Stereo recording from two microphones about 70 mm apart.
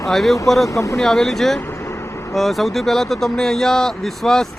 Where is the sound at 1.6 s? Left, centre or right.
Left.